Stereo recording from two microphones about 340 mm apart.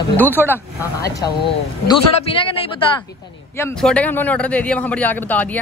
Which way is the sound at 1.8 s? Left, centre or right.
Centre.